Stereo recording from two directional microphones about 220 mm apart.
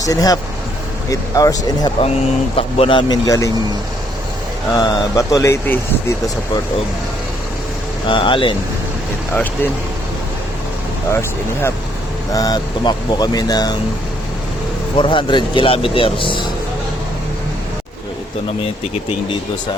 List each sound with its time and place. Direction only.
0.0 s speech: 15° left (ahead or behind)
4.7 s speech: 15° left (ahead or behind)
8.0 s speech: 20° left (ahead or behind)
11.1 s speech: 10° left (ahead or behind)
14.9 s speech: 20° left (ahead or behind)